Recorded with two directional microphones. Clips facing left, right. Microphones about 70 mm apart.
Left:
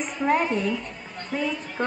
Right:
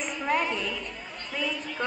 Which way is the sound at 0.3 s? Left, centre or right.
Left.